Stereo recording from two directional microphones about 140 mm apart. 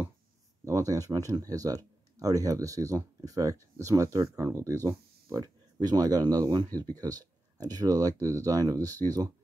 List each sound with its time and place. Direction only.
0.7 s speech: 25° right (ahead or behind)